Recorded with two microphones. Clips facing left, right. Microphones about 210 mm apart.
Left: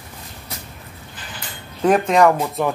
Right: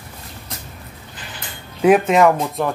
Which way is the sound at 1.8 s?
5° right (ahead or behind).